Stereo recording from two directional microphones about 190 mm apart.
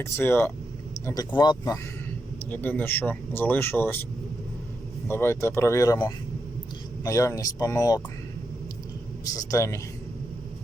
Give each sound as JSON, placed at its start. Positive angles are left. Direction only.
{"t": 0.0, "sound": "speech", "side_deg": 10}
{"t": 2.5, "sound": "speech", "side_deg": 10}
{"t": 5.0, "sound": "speech", "side_deg": 15}
{"t": 9.2, "sound": "speech", "side_deg": 20}